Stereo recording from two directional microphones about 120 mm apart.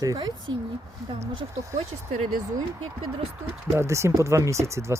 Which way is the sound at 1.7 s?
75° right (ahead or behind).